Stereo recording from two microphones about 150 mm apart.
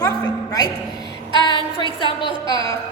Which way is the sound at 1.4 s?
30° left (ahead or behind).